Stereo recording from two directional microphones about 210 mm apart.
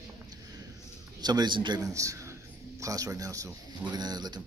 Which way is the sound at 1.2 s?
20° right (ahead or behind).